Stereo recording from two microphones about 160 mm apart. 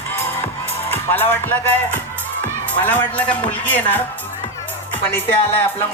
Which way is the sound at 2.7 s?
10° left (ahead or behind).